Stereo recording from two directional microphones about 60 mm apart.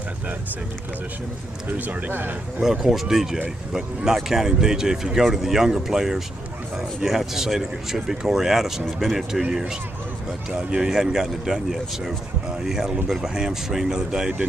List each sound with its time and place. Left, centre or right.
1.6 s speech: right
2.6 s speech: centre
10.5 s speech: centre